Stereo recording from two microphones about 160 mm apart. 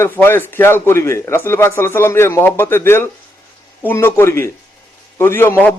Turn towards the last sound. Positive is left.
turn(degrees=10)  # may be behind; listen again after turning